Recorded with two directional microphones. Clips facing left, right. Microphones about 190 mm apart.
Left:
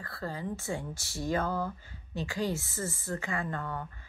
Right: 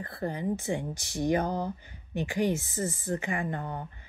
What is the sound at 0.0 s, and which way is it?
Speech, 20° right (ahead or behind).